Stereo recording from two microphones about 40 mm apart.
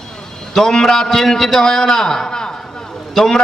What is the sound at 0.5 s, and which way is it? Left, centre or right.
A man's voice, centre.